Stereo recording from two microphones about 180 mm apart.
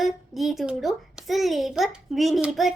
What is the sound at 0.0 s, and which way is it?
A child's voice, centre (ahead or behind).